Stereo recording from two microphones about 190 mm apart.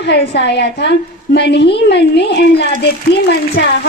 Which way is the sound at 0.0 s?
60° left (ahead or behind).